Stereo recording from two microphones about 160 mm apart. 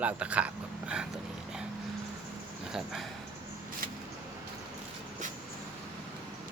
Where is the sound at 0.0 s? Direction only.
10° right (ahead or behind).